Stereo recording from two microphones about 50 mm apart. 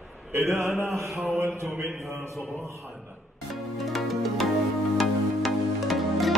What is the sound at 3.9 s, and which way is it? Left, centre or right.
Music, centre.